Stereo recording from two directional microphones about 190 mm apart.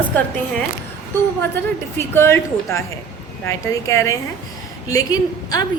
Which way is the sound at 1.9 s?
10° left (ahead or behind).